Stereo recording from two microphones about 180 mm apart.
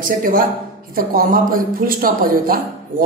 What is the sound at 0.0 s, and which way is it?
Speech, 50° right (ahead or behind).